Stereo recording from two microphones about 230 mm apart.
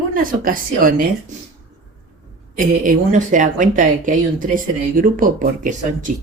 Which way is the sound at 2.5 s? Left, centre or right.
Right.